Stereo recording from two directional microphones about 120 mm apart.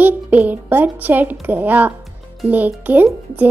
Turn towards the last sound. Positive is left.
turn(degrees=-15)  # may be behind; listen again after turning